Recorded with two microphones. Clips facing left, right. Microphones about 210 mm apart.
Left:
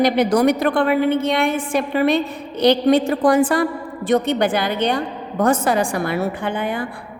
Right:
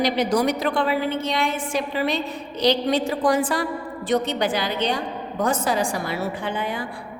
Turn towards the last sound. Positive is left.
turn(degrees=55)  # may be behind; listen again after turning